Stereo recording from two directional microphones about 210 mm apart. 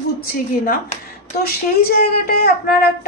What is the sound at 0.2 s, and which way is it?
A woman's voice, 45° left (ahead or behind).